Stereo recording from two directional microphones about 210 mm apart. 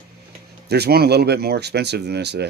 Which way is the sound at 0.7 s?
50° right (ahead or behind).